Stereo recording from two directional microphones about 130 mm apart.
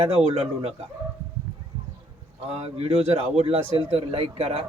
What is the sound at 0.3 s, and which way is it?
Speech, 55° right (ahead or behind).